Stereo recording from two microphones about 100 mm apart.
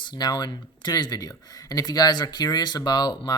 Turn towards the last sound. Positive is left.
turn(degrees=45)  # may be behind; listen again after turning